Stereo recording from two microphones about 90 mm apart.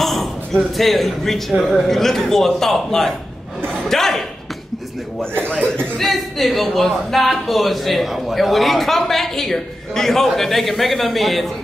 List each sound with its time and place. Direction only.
0.0 s speech: centre (ahead or behind)
5.9 s speech: centre (ahead or behind)